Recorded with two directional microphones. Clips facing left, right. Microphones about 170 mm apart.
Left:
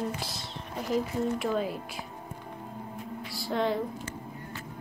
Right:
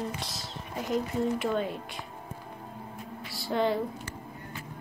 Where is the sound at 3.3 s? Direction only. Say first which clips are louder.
Right 1 dB; centre (ahead or behind).